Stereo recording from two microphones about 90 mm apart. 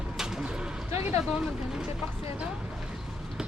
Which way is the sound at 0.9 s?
30° right (ahead or behind).